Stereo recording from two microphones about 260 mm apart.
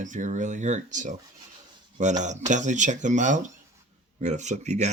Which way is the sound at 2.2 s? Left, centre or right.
Right.